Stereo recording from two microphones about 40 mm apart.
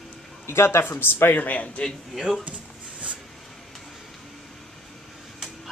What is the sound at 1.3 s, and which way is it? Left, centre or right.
Speech, left.